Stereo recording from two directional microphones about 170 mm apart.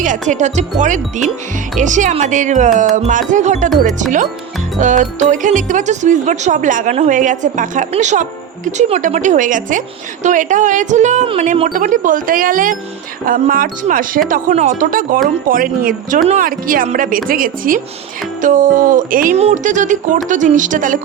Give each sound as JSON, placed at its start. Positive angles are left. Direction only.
{"t": 0.0, "sound": "speech", "side_deg": -45}
{"t": 4.8, "sound": "a woman's voice", "side_deg": -45}
{"t": 19.4, "sound": "speech", "side_deg": -40}